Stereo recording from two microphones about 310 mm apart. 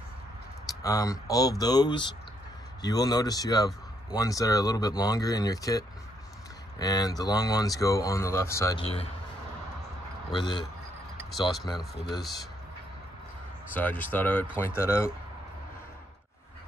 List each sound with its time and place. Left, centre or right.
0.8 s speech: centre
10.3 s speech: centre
11.8 s speech: centre
13.7 s speech: centre